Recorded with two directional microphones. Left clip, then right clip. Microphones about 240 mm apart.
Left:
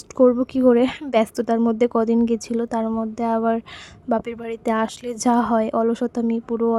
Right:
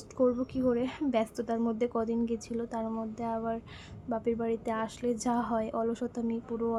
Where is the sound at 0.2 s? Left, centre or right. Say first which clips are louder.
Left 12 dB; left.